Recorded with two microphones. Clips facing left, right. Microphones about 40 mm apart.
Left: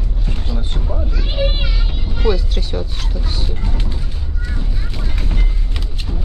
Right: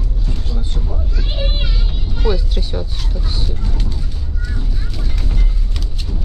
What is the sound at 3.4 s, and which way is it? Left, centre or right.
Vehicle, left.